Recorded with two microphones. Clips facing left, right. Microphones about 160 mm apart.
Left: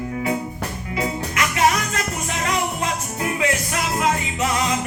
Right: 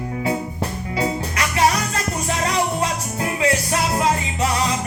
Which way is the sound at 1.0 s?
30° right (ahead or behind).